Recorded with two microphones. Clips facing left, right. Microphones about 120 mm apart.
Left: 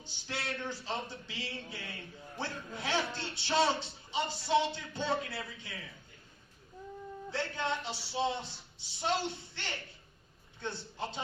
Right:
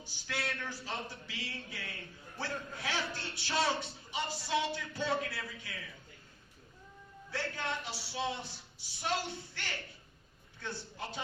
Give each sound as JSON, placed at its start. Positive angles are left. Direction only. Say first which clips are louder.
{"t": 0.0, "sound": "a woman's voice", "louder": "right 1 dB", "side_deg": 25}
{"t": 7.3, "sound": "a woman's voice", "louder": "left 3 dB", "side_deg": 25}